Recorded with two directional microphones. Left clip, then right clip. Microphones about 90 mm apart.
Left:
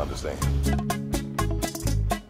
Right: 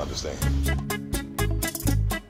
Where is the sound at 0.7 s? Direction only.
5° right (ahead or behind).